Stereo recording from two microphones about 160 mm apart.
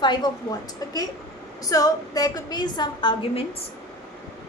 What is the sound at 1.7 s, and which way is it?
A woman's voice, 25° left (ahead or behind).